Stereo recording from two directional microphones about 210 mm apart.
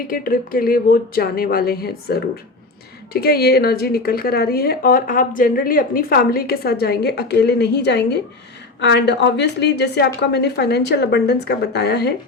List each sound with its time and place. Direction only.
0.1 s a woman's voice: 45° left (ahead or behind)